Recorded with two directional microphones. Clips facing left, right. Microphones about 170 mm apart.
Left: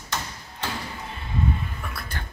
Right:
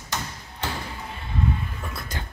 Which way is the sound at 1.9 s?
20° right (ahead or behind).